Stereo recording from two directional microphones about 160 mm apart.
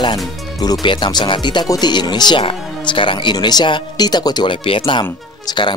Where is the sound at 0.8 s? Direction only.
30° left (ahead or behind).